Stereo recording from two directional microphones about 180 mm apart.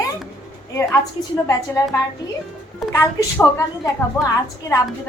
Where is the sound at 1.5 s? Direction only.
15° left (ahead or behind).